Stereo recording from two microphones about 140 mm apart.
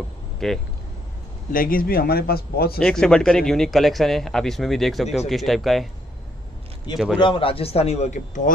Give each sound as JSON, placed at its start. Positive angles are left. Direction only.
{"t": 0.4, "sound": "a man's voice", "side_deg": 0}
{"t": 1.5, "sound": "speech", "side_deg": 90}
{"t": 2.8, "sound": "a man's voice", "side_deg": 5}
{"t": 7.2, "sound": "a man's voice", "side_deg": 40}
{"t": 8.5, "sound": "speech", "side_deg": 75}